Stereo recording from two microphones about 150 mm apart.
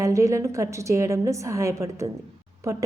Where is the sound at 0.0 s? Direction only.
20° right (ahead or behind).